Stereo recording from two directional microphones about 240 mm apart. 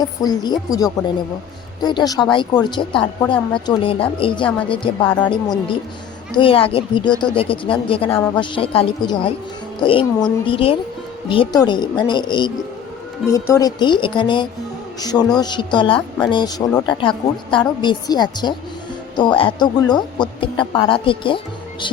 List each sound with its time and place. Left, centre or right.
0.2 s a woman's voice: centre